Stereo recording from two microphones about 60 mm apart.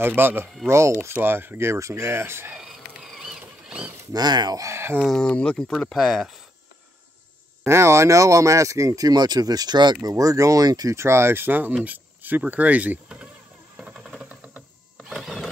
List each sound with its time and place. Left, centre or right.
0.0 s speech: right
0.7 s speech: right
1.1 s speech: right
2.7 s mechanisms: centre
4.1 s speech: right
5.1 s speech: centre
5.9 s speech: centre
7.6 s speech: right
10.0 s speech: right
11.0 s speech: right
13.7 s a sound: centre